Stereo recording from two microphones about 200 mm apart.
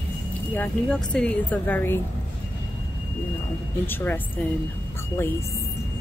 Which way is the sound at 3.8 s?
10° left (ahead or behind).